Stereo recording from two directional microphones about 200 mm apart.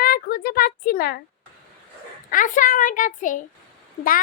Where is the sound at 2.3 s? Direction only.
40° left (ahead or behind).